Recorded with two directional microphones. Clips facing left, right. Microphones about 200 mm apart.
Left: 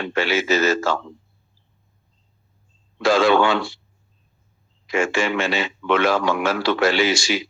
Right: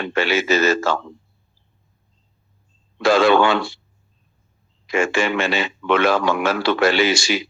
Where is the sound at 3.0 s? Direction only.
60° right (ahead or behind).